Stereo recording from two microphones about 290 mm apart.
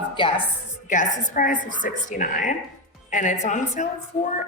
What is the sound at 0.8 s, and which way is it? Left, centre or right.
A woman's voice, left.